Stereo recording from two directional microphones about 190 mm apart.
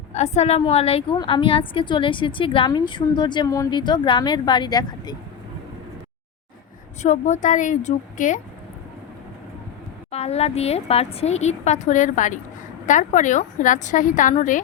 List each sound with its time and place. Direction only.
0.1 s a woman's voice: 35° left (ahead or behind)
7.0 s a woman's voice: 40° left (ahead or behind)
10.1 s a woman's voice: 35° left (ahead or behind)